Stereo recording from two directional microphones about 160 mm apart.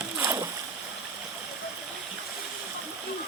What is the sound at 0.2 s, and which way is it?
Boat, 20° right (ahead or behind).